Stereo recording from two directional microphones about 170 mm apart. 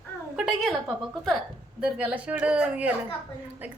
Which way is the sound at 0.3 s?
5° right (ahead or behind).